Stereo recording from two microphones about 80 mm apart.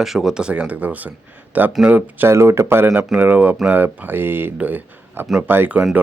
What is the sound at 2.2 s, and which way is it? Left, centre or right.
Speech, right.